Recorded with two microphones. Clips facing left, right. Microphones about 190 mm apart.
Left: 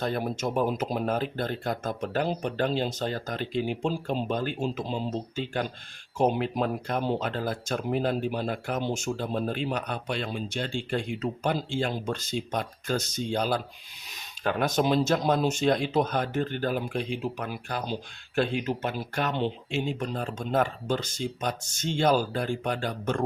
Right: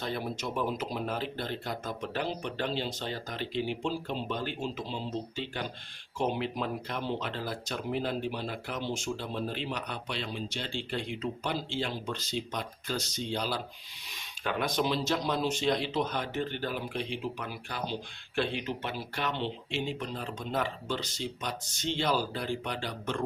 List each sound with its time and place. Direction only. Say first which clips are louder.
0.0 s speech: left 6 dB; 50° left (ahead or behind)